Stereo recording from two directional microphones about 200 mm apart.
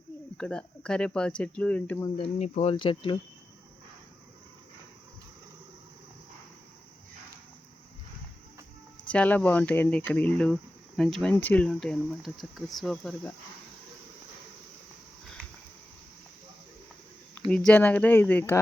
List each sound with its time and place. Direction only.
0.3 s speech: 5° left (ahead or behind)
2.1 s speech: 30° left (ahead or behind)
9.0 s speech: 5° left (ahead or behind)
17.5 s speech: 5° left (ahead or behind)